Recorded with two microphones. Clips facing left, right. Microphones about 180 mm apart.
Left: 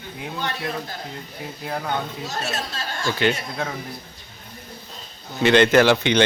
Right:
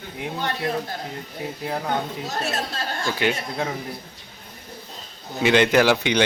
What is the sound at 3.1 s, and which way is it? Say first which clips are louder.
Speech: left 2 dB; 15° right (ahead or behind).